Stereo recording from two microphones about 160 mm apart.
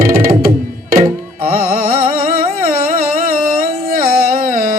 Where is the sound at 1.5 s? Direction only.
65° right (ahead or behind).